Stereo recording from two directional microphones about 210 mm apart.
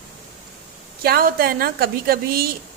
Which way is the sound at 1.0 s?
45° right (ahead or behind).